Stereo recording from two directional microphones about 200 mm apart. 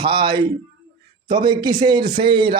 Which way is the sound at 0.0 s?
25° right (ahead or behind).